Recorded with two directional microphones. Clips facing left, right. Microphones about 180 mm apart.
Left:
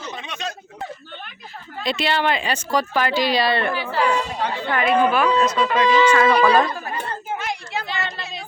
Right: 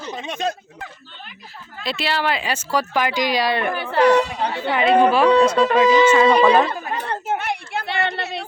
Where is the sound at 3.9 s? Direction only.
70° right (ahead or behind).